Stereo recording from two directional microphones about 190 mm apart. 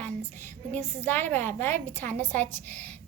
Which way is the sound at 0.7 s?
10° left (ahead or behind).